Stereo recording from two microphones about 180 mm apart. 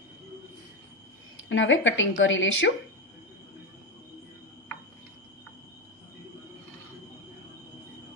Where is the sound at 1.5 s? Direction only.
90° left.